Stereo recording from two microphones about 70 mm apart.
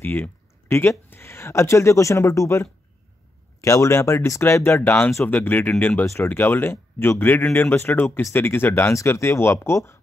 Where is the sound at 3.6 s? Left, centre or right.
Left.